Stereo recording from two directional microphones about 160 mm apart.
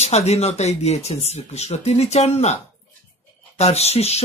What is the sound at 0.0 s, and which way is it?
Speech, 40° left (ahead or behind).